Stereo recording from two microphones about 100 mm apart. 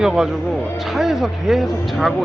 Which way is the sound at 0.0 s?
5° right (ahead or behind).